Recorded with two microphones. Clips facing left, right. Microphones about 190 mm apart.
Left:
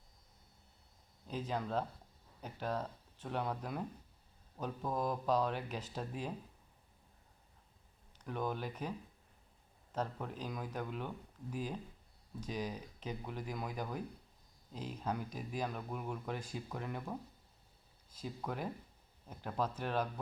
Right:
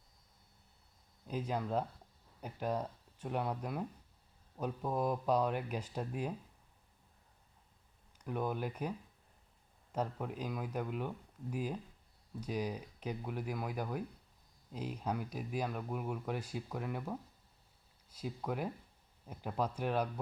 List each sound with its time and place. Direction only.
1.3 s speech: 10° right (ahead or behind)
8.2 s speech: 10° right (ahead or behind)
9.9 s speech: 10° right (ahead or behind)